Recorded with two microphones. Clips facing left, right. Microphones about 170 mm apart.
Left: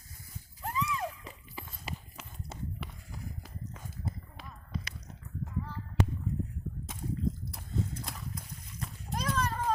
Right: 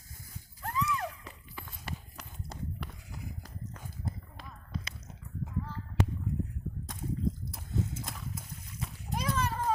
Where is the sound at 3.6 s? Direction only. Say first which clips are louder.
Even; centre (ahead or behind).